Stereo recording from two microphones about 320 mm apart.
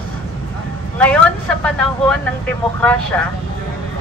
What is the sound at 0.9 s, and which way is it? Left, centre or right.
Speech, centre.